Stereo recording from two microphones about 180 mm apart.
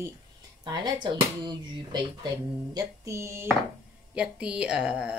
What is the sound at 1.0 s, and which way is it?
Speech, 25° right (ahead or behind).